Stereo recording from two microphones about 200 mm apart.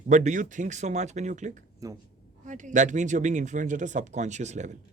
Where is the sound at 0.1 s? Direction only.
40° right (ahead or behind).